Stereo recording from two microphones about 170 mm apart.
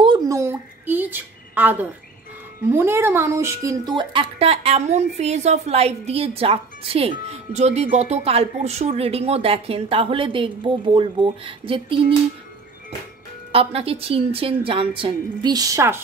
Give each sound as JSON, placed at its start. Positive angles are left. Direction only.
{"t": 0.0, "sound": "a sound", "side_deg": -25}
{"t": 2.7, "sound": "a woman's voice", "side_deg": -15}
{"t": 13.5, "sound": "a woman's voice", "side_deg": -35}